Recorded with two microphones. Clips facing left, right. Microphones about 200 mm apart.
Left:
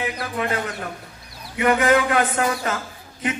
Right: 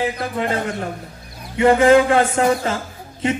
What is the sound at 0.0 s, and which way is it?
A man's voice, 25° right (ahead or behind).